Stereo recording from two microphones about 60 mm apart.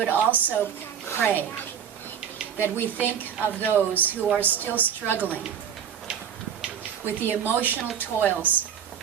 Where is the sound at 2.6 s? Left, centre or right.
Left.